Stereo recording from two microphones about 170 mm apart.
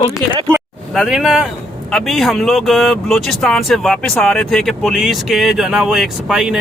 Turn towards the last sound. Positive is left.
turn(degrees=-5)  # may be behind; listen again after turning